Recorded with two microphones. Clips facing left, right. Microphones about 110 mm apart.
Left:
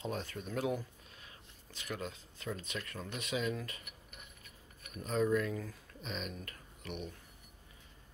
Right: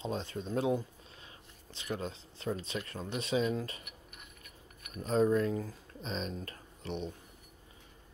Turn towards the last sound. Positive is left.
turn(degrees=-30)  # may be behind; listen again after turning